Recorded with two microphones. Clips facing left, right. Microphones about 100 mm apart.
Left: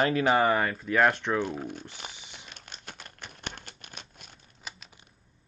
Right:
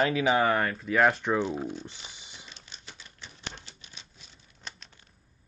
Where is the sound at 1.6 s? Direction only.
55° left (ahead or behind).